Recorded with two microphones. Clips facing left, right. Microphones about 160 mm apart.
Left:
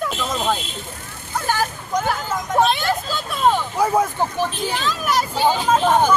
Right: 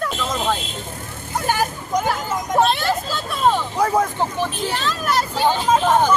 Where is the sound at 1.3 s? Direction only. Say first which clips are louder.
Right 1 dB; 15° right (ahead or behind).